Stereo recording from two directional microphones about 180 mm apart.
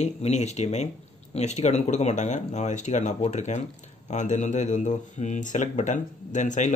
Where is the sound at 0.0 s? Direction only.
40° left (ahead or behind).